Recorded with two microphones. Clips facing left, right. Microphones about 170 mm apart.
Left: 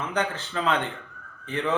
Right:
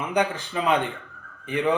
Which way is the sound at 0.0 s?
10° right (ahead or behind).